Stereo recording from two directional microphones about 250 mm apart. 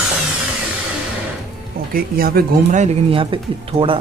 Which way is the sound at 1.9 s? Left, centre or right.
Right.